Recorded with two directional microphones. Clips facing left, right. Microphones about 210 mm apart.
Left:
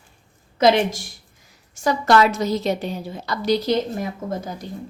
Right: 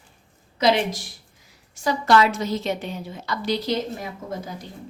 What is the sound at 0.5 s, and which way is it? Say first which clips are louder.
A woman's voice: left 4 dB; 50° left (ahead or behind).